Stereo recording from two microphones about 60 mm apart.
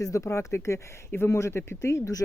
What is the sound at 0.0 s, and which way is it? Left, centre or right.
Speech, left.